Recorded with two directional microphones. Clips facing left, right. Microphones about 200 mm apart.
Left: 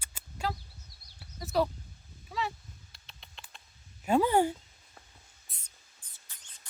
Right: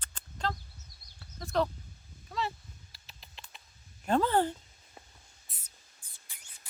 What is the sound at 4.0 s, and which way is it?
Speech, 10° left (ahead or behind).